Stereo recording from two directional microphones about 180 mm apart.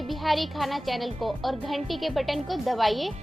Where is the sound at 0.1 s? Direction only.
Centre (ahead or behind).